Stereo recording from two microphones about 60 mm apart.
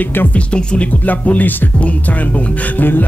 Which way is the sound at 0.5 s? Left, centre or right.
Centre.